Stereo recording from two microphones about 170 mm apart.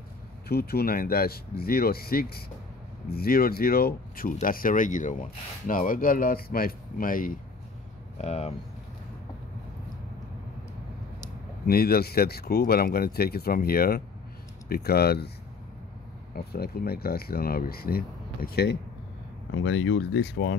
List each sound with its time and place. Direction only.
0.5 s speech: 65° left (ahead or behind)
8.2 s speech: 40° left (ahead or behind)
11.6 s speech: 65° left (ahead or behind)
16.3 s speech: 65° left (ahead or behind)
19.6 s speech: 90° left